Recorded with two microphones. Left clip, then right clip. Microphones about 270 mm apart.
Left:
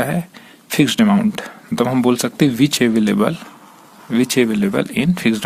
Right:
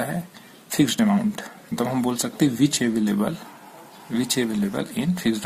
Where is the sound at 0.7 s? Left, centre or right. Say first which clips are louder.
Left 6 dB; left.